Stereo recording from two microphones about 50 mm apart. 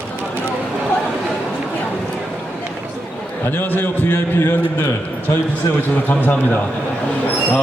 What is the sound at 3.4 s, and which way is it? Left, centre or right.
Speech, left.